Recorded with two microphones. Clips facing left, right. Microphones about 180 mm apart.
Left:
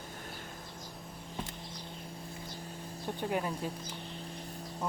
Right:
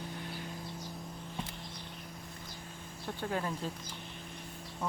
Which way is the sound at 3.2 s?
15° left (ahead or behind).